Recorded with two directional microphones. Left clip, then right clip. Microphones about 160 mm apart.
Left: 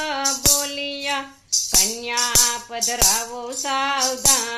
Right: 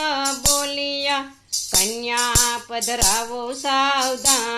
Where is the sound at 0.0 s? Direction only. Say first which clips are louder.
Even; 40° right (ahead or behind).